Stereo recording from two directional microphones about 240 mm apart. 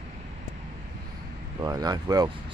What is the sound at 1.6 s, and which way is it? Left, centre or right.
Speech, centre.